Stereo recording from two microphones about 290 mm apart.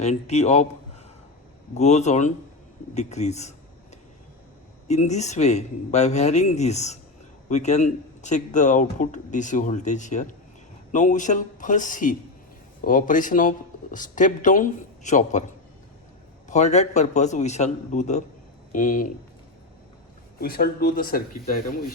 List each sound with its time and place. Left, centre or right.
0.0 s speech: left
1.7 s speech: left
4.9 s speech: left
16.5 s speech: left
20.4 s speech: left